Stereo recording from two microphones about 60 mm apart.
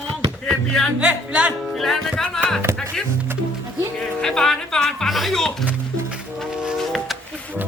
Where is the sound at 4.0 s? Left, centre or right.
Centre.